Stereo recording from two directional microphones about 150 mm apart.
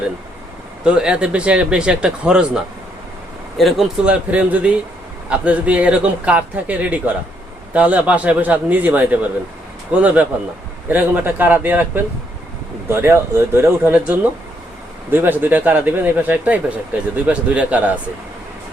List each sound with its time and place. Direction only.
0.9 s a man's voice: 5° right (ahead or behind)
3.6 s a man's voice: centre (ahead or behind)